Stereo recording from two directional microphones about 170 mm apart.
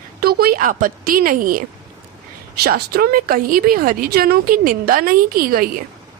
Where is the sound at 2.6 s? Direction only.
65° right (ahead or behind).